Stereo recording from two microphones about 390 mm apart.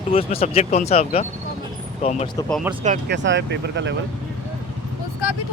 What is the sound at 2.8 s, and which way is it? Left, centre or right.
Speech, right.